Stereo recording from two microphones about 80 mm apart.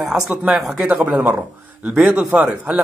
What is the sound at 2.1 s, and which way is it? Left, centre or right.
Speech, centre.